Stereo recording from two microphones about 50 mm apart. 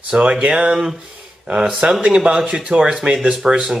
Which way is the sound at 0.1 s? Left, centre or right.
Centre.